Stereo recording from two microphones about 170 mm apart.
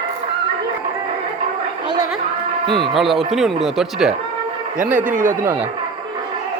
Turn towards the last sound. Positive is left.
turn(degrees=-50)  # may be behind; listen again after turning